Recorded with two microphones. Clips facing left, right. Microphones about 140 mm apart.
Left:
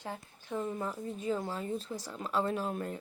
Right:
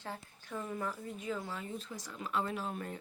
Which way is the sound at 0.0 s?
20° left (ahead or behind).